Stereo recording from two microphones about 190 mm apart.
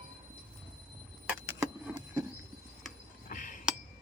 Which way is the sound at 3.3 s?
45° left (ahead or behind).